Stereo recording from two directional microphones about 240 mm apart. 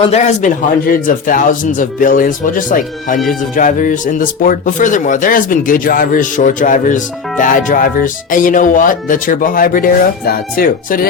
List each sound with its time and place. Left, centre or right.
0.0 s speech: left